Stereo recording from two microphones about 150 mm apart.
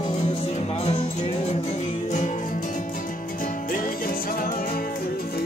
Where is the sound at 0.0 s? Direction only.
35° left (ahead or behind).